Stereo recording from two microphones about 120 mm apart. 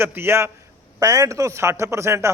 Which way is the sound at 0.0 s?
20° right (ahead or behind).